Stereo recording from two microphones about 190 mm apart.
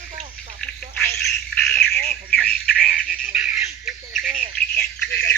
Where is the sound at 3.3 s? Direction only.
5° right (ahead or behind).